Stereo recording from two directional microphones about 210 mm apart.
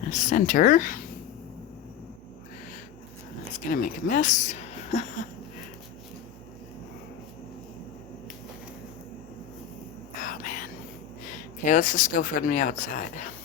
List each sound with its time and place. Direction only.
0.1 s speech: 35° left (ahead or behind)
3.7 s speech: 40° left (ahead or behind)
10.2 s a sound: 40° left (ahead or behind)
11.6 s speech: 35° left (ahead or behind)